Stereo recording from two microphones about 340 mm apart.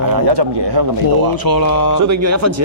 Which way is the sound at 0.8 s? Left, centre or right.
Right.